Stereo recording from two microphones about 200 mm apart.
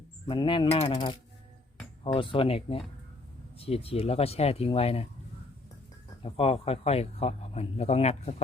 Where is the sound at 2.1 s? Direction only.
25° left (ahead or behind).